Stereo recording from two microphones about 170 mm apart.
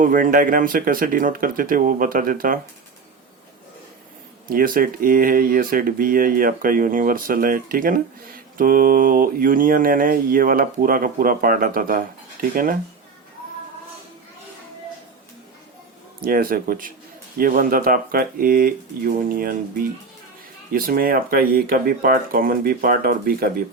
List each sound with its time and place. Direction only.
0.0 s mantra: 55° right (ahead or behind)
4.4 s mantra: 55° right (ahead or behind)
16.2 s mantra: 55° right (ahead or behind)